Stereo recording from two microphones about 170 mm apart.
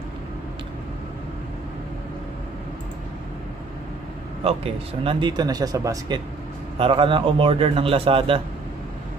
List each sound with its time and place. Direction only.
4.5 s a man's voice: 30° right (ahead or behind)